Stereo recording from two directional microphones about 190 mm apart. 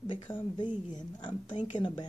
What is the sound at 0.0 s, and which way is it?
Speech, 25° left (ahead or behind).